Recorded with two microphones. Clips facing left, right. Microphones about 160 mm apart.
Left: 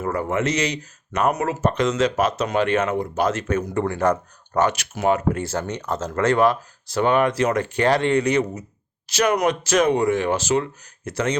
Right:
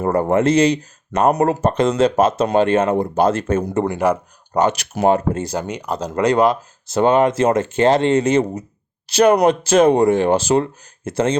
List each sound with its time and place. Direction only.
0.0 s speech: 35° right (ahead or behind)
4.0 s speech: 10° right (ahead or behind)
4.8 s speech: 35° right (ahead or behind)
5.4 s speech: 15° right (ahead or behind)